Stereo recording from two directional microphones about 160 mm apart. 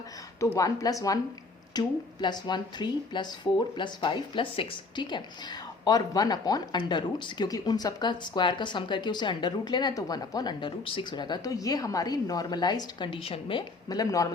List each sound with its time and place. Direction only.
0.3 s a woman's voice: 20° left (ahead or behind)